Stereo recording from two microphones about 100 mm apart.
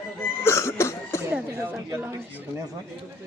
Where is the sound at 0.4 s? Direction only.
30° left (ahead or behind).